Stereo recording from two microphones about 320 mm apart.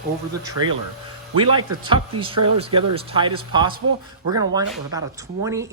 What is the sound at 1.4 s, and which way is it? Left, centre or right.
Speech, centre.